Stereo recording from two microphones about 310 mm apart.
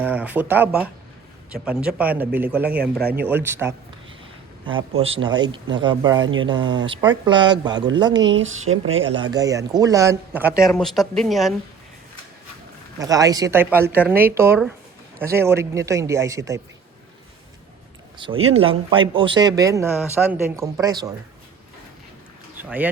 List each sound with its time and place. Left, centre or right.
0.0 s speech: centre
8.3 s speech: right
9.1 s speech: centre
13.0 s speech: centre
18.2 s speech: centre
22.5 s speech: centre